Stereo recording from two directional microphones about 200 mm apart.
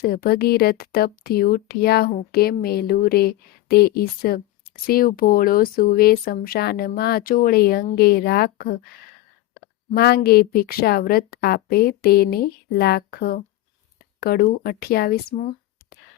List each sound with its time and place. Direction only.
0.0 s speech: 50° left (ahead or behind)
9.9 s speech: 55° left (ahead or behind)